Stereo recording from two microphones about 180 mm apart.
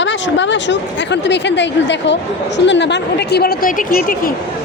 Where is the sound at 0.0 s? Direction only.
85° left; by 4.4 s 50° left (ahead or behind).